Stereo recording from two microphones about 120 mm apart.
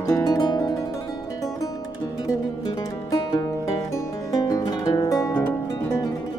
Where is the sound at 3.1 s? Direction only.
35° left (ahead or behind).